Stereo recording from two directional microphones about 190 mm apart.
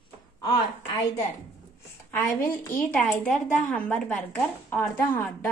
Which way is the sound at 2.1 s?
10° left (ahead or behind).